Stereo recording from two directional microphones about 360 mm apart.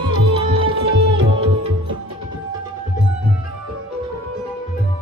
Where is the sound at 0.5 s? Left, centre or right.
Centre.